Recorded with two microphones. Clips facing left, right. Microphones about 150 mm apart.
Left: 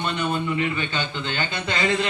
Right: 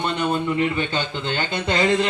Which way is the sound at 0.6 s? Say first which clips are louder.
Right 3 dB; 40° right (ahead or behind).